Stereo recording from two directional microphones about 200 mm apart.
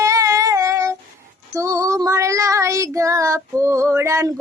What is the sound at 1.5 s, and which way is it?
Child singing, 15° right (ahead or behind).